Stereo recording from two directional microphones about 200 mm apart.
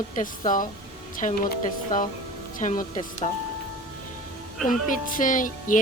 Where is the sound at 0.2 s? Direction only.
40° left (ahead or behind).